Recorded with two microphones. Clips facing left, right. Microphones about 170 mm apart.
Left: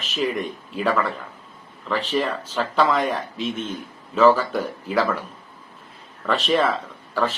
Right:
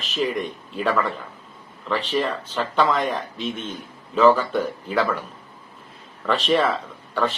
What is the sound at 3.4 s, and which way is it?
Speech, 35° right (ahead or behind).